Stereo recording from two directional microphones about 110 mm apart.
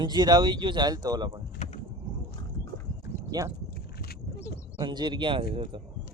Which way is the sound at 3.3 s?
35° right (ahead or behind).